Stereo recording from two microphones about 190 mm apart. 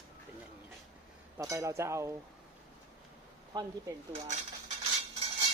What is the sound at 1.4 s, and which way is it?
Speech, 15° right (ahead or behind).